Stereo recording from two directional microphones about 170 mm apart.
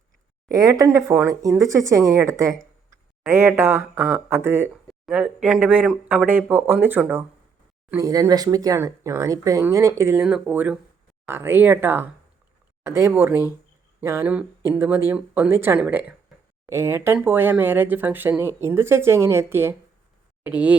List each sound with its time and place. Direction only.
0.4 s speech: 20° right (ahead or behind)